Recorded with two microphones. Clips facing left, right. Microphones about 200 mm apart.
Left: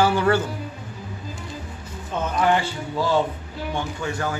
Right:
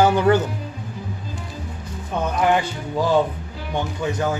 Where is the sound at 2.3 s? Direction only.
15° right (ahead or behind).